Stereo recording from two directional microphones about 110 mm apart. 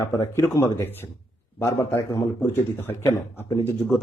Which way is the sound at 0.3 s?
30° left (ahead or behind).